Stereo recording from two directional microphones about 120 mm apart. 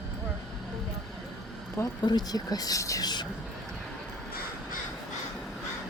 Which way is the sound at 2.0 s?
35° left (ahead or behind).